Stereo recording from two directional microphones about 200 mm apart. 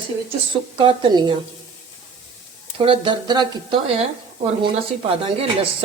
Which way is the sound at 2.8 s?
25° right (ahead or behind).